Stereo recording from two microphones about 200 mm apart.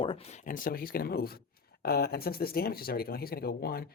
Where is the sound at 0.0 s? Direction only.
25° left (ahead or behind).